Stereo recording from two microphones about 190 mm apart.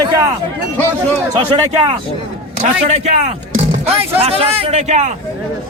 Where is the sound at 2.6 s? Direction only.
40° right (ahead or behind).